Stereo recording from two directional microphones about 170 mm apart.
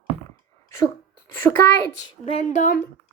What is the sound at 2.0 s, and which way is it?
Speech, 35° left (ahead or behind).